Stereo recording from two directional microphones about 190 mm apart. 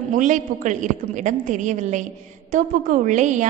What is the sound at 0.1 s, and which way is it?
A woman's voice, 40° right (ahead or behind).